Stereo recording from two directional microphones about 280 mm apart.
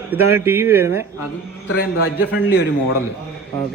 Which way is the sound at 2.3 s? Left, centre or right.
Left.